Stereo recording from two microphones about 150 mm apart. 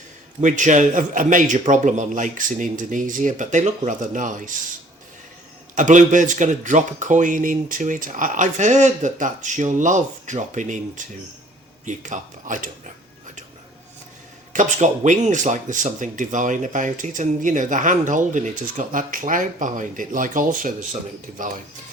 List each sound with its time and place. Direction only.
0.4 s speech: 55° right (ahead or behind)
5.7 s speech: 55° right (ahead or behind)
14.5 s speech: 55° right (ahead or behind)